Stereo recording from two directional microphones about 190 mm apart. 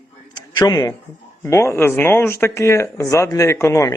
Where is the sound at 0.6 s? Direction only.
20° left (ahead or behind).